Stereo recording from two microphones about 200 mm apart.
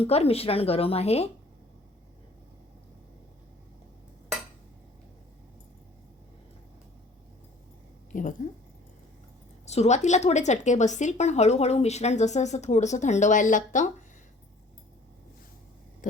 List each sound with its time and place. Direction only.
0.0 s speech: 30° left (ahead or behind)
8.1 s speech: 40° left (ahead or behind)
9.6 s speech: 35° left (ahead or behind)